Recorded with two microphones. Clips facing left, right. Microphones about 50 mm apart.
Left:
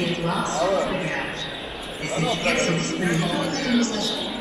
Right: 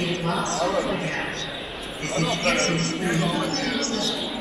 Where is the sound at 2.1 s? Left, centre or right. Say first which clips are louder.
Even; centre.